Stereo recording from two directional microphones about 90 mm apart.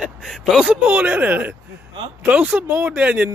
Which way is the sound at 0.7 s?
15° right (ahead or behind).